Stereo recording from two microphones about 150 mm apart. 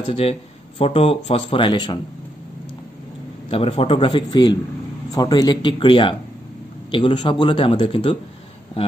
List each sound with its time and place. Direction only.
0.1 s speech: 40° left (ahead or behind)
3.4 s speech: 40° left (ahead or behind)